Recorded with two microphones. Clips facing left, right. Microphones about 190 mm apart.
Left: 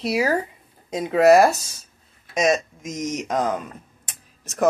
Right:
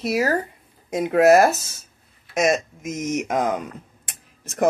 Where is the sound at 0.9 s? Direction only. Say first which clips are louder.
Even; 10° right (ahead or behind).